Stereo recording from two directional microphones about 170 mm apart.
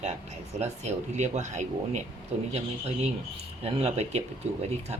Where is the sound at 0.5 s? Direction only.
40° right (ahead or behind).